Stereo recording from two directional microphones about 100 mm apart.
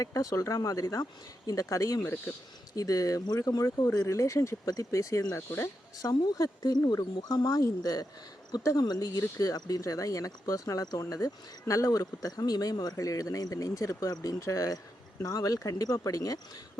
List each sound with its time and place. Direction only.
0.0 s speech: 35° left (ahead or behind)
6.0 s speech: 35° left (ahead or behind)